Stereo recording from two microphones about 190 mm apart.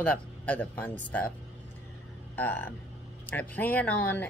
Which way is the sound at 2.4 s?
10° left (ahead or behind).